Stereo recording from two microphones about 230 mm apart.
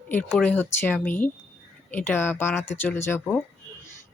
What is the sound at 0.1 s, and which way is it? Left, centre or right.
Speech, centre.